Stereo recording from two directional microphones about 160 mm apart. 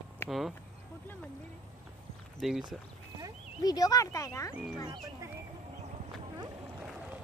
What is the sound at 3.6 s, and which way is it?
Speech, 20° left (ahead or behind).